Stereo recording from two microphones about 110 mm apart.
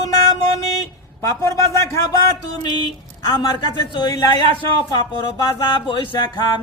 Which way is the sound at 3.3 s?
40° left (ahead or behind).